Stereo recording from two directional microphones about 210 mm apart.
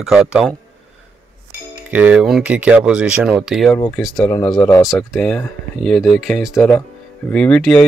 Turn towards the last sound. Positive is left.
turn(degrees=5)  # may be behind; listen again after turning